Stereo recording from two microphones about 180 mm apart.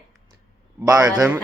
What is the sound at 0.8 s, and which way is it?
Speech, 20° right (ahead or behind).